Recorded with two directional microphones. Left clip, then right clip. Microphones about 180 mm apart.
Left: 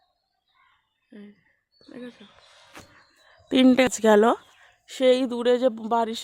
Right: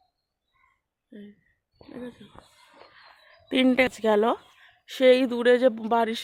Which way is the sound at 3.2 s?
40° left (ahead or behind).